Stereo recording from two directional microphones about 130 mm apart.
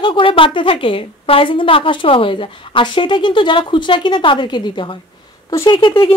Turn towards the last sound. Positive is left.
turn(degrees=40)  # may be behind; listen again after turning